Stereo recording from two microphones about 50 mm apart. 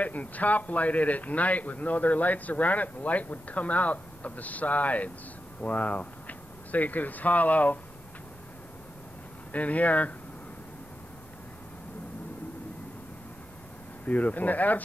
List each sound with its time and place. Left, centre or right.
0.0 s a man's voice: left
9.5 s a man's voice: left
14.0 s a man's voice: left